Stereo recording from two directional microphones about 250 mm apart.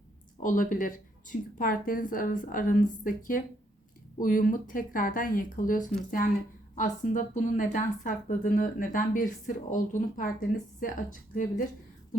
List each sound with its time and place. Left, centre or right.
0.3 s speech: left